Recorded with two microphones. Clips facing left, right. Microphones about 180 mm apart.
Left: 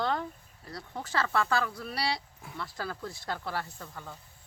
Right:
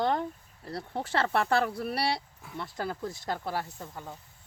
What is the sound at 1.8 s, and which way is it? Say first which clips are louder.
Speech: right 3 dB; 55° right (ahead or behind).